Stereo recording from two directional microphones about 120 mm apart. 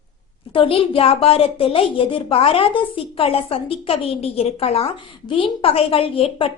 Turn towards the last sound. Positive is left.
turn(degrees=50)  # may be behind; listen again after turning